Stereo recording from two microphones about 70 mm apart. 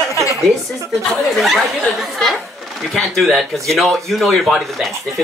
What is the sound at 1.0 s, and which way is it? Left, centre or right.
Speech, centre.